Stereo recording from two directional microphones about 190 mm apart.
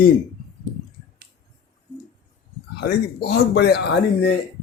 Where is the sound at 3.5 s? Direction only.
60° left (ahead or behind).